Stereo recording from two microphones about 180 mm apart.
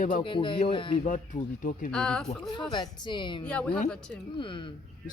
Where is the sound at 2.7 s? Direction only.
25° left (ahead or behind).